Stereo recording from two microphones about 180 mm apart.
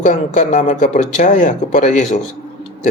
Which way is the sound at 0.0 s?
45° left (ahead or behind).